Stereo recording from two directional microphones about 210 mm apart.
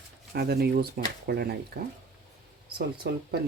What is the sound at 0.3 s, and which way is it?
Speech, 50° right (ahead or behind).